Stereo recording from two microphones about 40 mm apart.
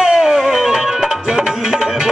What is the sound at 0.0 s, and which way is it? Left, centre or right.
Music, centre.